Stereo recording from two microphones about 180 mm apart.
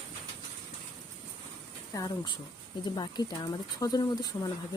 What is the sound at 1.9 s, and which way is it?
Speech, 20° left (ahead or behind).